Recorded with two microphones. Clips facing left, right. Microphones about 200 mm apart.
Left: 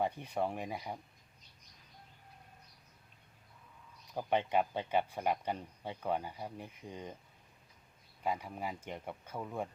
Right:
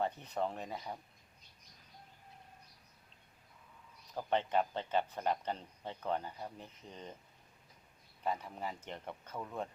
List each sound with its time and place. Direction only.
0.0 s speech: 10° left (ahead or behind)
4.1 s speech: 15° left (ahead or behind)
8.2 s speech: 10° left (ahead or behind)